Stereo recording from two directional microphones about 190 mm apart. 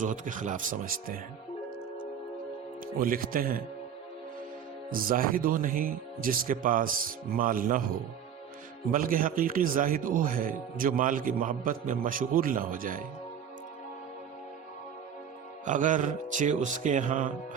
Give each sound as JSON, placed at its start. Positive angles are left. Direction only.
{"t": 0.0, "sound": "a man's voice", "side_deg": -40}
{"t": 3.0, "sound": "a man's voice", "side_deg": -50}
{"t": 4.9, "sound": "a man's voice", "side_deg": -50}
{"t": 8.9, "sound": "a man's voice", "side_deg": -45}
{"t": 15.6, "sound": "speech", "side_deg": -40}